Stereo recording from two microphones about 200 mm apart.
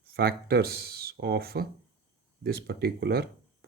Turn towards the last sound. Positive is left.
turn(degrees=-50)  # may be behind; listen again after turning